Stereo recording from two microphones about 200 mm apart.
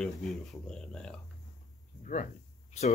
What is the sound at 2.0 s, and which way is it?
Speech, 40° left (ahead or behind).